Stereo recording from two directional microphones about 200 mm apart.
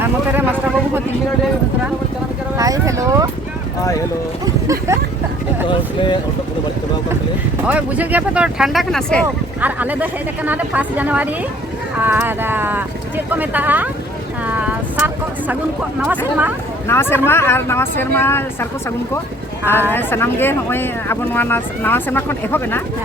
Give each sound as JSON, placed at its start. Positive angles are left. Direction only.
{"t": 2.6, "sound": "speech", "side_deg": -15}
{"t": 4.4, "sound": "speech", "side_deg": -15}
{"t": 5.6, "sound": "speech", "side_deg": 25}
{"t": 7.7, "sound": "speech", "side_deg": -5}
{"t": 9.6, "sound": "speech", "side_deg": -10}
{"t": 14.4, "sound": "vehicle", "side_deg": -5}
{"t": 16.0, "sound": "speech", "side_deg": -10}
{"t": 16.9, "sound": "speech", "side_deg": 10}